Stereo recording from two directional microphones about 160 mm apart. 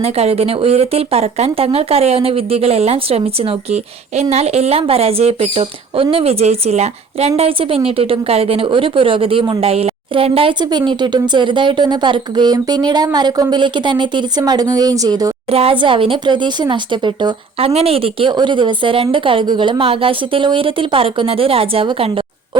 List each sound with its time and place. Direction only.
0.0 s speech: 40° right (ahead or behind); by 15.3 s 25° right (ahead or behind)
15.4 s speech: 40° right (ahead or behind)
17.7 s speech: 40° right (ahead or behind)